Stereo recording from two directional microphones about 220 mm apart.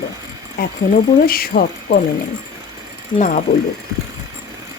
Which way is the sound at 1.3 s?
40° left (ahead or behind).